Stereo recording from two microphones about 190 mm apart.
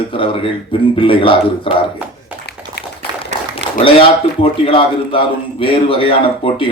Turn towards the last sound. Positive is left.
turn(degrees=30)  # may be behind; listen again after turning